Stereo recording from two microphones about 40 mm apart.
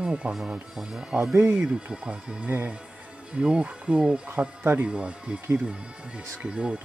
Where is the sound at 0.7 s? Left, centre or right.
Centre.